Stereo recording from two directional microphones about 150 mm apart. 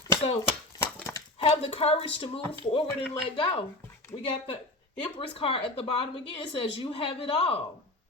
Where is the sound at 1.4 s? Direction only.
40° left (ahead or behind).